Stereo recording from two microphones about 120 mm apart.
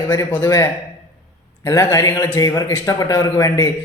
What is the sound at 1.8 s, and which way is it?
A man's voice, 20° left (ahead or behind).